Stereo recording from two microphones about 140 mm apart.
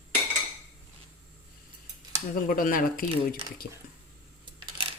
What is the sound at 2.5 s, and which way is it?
Speech, 85° left.